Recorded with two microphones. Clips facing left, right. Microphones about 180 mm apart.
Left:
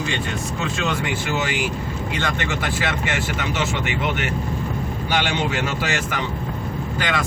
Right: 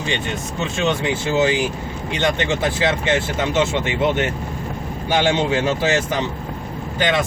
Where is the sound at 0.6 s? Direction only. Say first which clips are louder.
Right 5 dB; 25° right (ahead or behind).